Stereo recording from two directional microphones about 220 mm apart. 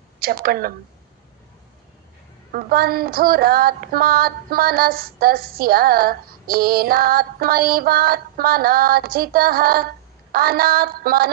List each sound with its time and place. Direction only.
0.2 s a woman's voice: 45° right (ahead or behind)
2.5 s female singing: 45° right (ahead or behind)